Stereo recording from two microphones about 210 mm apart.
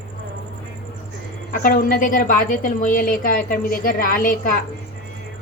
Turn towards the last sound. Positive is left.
turn(degrees=40)  # may be behind; listen again after turning